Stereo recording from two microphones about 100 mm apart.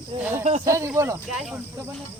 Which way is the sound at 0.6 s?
30° right (ahead or behind).